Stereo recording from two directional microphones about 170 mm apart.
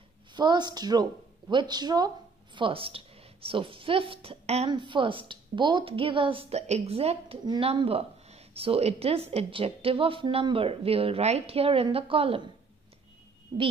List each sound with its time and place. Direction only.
0.3 s a woman's voice: 25° right (ahead or behind)